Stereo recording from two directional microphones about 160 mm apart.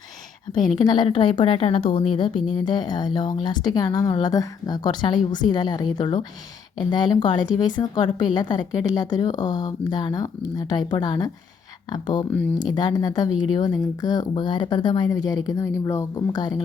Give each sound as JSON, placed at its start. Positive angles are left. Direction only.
{"t": 0.8, "sound": "a woman's voice", "side_deg": 25}
{"t": 12.3, "sound": "speech", "side_deg": 10}
{"t": 12.5, "sound": "a woman's voice", "side_deg": 25}